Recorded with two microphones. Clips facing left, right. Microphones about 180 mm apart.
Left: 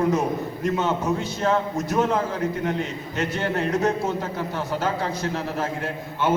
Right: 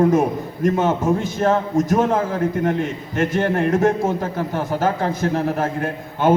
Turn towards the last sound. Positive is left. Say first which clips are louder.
# right 6 dB
turn(degrees=-50)  # may be behind; listen again after turning